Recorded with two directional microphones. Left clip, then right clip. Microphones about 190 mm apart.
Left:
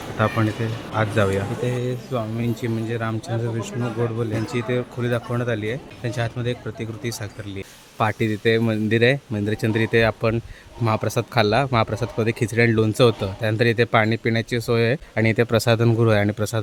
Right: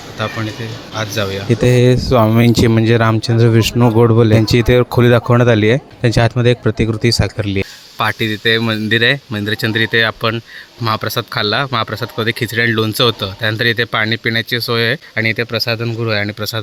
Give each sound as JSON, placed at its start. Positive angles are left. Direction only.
{"t": 0.9, "sound": "speech", "side_deg": 0}
{"t": 1.6, "sound": "speech", "side_deg": -50}
{"t": 7.9, "sound": "speech", "side_deg": 0}